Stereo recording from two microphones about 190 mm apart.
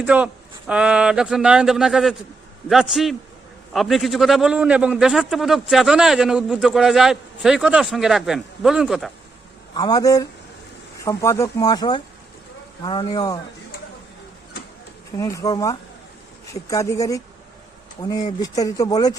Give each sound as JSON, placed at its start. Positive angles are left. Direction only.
{"t": 0.0, "sound": "a man's voice", "side_deg": -10}
{"t": 9.7, "sound": "speech", "side_deg": 20}
{"t": 15.1, "sound": "speech", "side_deg": 15}